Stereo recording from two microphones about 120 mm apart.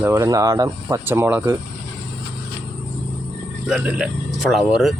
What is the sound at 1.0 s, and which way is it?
Speech, 20° right (ahead or behind).